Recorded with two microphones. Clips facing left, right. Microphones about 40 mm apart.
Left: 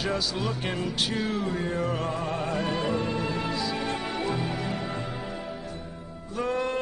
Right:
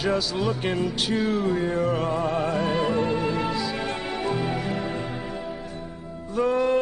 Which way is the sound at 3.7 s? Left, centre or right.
Right.